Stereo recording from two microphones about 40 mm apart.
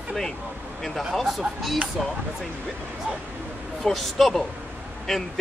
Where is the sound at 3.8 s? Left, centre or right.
Centre.